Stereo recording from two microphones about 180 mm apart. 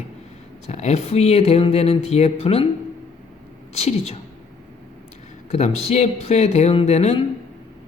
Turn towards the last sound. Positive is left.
turn(degrees=35)  # may be behind; listen again after turning